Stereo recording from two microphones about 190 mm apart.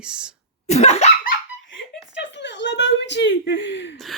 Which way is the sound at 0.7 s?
35° left (ahead or behind).